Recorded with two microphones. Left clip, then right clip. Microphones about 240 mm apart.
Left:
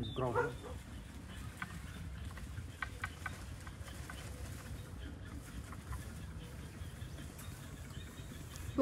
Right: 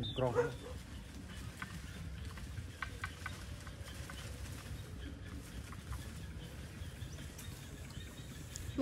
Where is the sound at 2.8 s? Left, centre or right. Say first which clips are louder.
Left 1 dB; centre.